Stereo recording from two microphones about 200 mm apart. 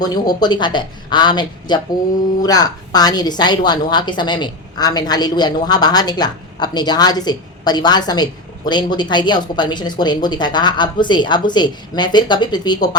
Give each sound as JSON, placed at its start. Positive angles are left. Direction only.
{"t": 0.0, "sound": "a woman's voice", "side_deg": 20}